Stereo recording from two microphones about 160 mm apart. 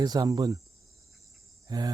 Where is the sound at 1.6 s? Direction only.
25° right (ahead or behind).